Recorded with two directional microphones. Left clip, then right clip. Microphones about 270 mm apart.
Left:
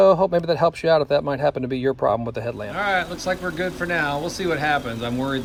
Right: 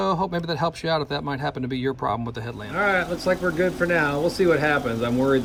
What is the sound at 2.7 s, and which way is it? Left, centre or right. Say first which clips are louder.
Speech: right 1 dB; centre.